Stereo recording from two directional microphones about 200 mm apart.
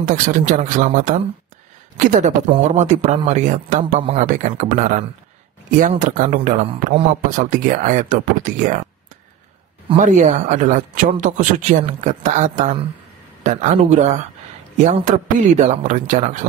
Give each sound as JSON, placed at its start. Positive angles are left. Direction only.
{"t": 0.0, "sound": "speech", "side_deg": -40}
{"t": 9.9, "sound": "speech", "side_deg": -40}